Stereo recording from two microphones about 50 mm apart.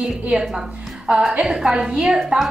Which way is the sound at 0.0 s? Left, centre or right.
Centre.